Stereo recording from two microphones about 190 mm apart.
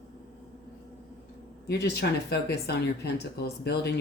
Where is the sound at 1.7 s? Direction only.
60° left (ahead or behind).